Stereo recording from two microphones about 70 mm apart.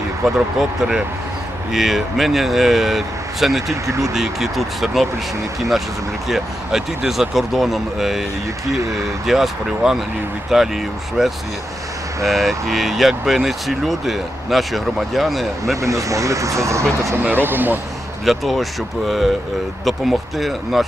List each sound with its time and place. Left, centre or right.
0.3 s speech: centre
6.2 s speech: centre
15.8 s speech: right
17.3 s speech: right
18.3 s speech: centre